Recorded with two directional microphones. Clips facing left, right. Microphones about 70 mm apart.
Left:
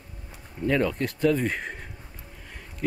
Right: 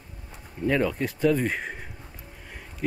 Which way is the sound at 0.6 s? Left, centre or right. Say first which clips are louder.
Even; centre.